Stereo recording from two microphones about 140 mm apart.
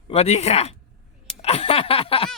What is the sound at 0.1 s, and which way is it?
Speech, 50° left (ahead or behind).